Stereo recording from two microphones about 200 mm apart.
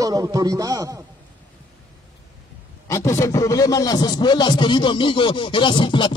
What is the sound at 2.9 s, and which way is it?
A man's voice, 15° left (ahead or behind).